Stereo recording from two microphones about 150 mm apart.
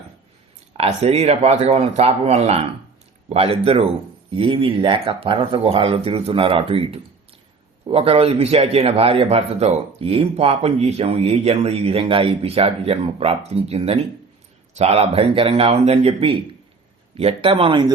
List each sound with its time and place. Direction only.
0.8 s a man's voice: 45° right (ahead or behind)